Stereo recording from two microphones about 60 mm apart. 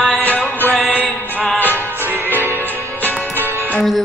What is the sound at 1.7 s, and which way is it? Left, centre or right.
Music, right.